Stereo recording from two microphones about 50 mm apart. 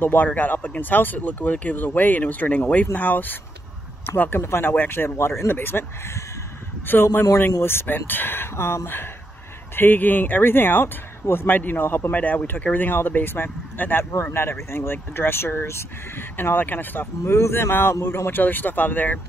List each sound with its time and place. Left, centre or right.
0.0 s speech: left
5.1 s speech: left
5.5 s speech: left
6.9 s speech: left
9.8 s speech: left
12.1 s speech: left
17.2 s speech: left